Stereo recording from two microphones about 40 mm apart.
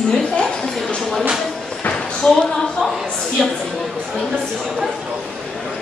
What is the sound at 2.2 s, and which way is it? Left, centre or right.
Speech, left.